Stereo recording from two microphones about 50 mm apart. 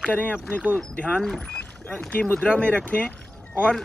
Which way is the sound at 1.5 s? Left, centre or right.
Left.